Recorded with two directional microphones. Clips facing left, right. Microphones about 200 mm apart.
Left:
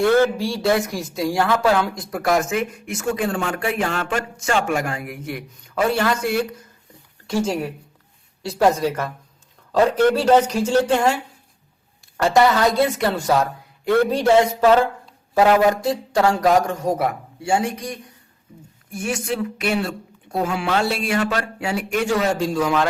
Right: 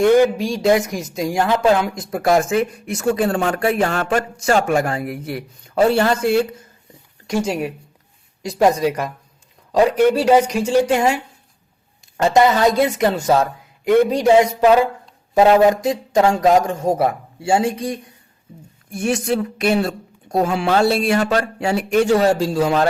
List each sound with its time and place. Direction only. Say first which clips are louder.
0.0 s speech: right 3 dB; 20° right (ahead or behind)
7.3 s speech: right 1 dB; 15° right (ahead or behind)
18.9 s speech: right 5 dB; 35° right (ahead or behind)